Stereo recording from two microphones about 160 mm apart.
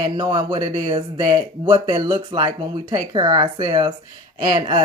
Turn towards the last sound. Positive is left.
turn(degrees=-30)  # may be behind; listen again after turning